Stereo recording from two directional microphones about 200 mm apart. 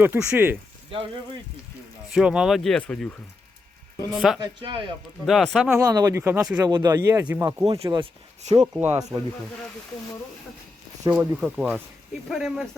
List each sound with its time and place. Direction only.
0.0 s speech: 5° right (ahead or behind)
0.9 s speech: 25° right (ahead or behind)
2.1 s speech: 5° right (ahead or behind)
4.4 s speech: 25° right (ahead or behind)
5.2 s speech: centre (ahead or behind)
5.8 s speech: 15° right (ahead or behind)
6.6 s speech: 20° right (ahead or behind)
7.6 s speech: 25° right (ahead or behind)
8.5 s speech: 10° right (ahead or behind)
11.0 s speech: 10° right (ahead or behind)